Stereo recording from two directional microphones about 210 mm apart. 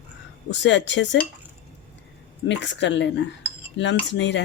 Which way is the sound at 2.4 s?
60° left (ahead or behind).